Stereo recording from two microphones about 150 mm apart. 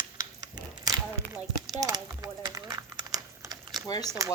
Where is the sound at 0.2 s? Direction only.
25° right (ahead or behind).